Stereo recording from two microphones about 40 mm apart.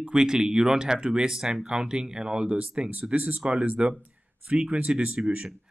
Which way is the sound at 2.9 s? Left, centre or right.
Right.